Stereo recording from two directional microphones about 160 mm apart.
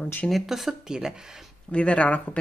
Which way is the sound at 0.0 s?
10° left (ahead or behind).